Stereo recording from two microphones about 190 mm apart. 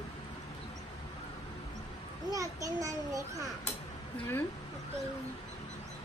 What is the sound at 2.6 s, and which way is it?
Speech, 20° right (ahead or behind).